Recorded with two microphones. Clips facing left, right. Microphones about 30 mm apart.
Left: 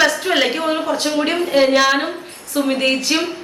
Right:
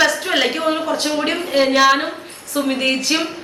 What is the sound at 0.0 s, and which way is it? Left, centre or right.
A woman's voice, centre.